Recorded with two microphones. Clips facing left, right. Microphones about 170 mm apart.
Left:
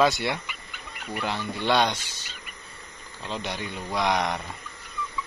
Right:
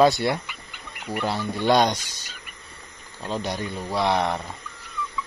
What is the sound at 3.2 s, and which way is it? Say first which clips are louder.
Speech: right 4 dB; 40° right (ahead or behind).